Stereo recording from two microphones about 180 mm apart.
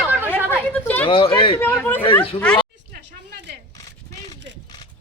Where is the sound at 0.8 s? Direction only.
10° left (ahead or behind).